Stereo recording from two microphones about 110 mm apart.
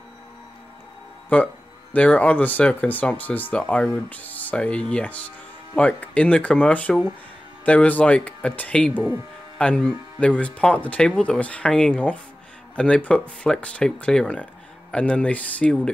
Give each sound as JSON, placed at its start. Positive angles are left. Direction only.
{"t": 1.3, "sound": "speech", "side_deg": 15}
{"t": 8.9, "sound": "speech", "side_deg": -15}
{"t": 9.6, "sound": "speech", "side_deg": 10}